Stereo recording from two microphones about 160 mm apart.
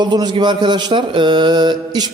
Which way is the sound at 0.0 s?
25° right (ahead or behind).